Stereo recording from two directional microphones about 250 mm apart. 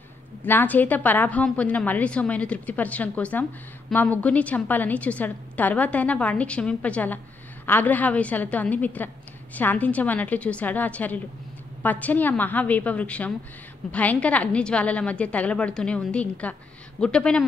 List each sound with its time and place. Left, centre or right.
0.4 s a woman's voice: centre